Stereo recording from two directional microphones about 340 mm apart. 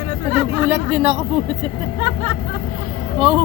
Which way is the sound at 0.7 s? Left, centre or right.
Centre.